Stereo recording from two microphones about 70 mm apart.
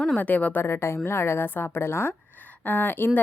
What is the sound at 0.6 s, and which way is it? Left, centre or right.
Speech, left.